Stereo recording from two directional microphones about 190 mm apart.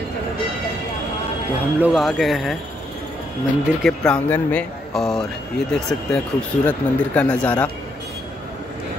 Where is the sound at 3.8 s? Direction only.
5° left (ahead or behind).